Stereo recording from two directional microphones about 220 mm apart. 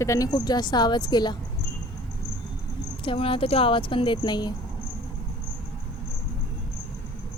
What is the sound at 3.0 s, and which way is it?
Speech, 25° left (ahead or behind).